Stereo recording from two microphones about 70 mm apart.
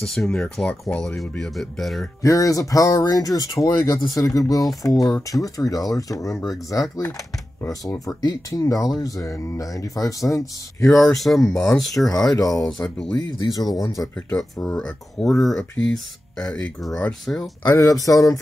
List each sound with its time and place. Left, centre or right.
0.0 s speech: centre
2.2 s speech: left
11.0 s speech: centre
11.4 s speech: left
12.0 s speech: centre
12.4 s speech: left
12.6 s speech: centre
13.1 s speech: left
13.7 s speech: left
14.1 s speech: centre
15.2 s speech: centre
17.6 s speech: left